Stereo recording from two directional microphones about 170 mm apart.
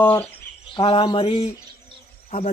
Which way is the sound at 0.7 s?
30° left (ahead or behind).